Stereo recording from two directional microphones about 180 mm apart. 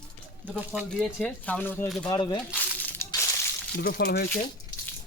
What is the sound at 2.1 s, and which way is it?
Speech, 25° left (ahead or behind).